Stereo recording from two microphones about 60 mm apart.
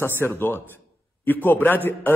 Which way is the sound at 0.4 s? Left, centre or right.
Left.